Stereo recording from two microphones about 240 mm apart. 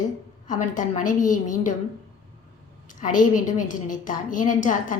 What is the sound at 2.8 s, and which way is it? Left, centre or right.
A woman's voice, left.